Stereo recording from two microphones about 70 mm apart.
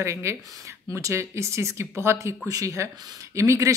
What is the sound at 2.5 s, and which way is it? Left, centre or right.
A woman's voice, right.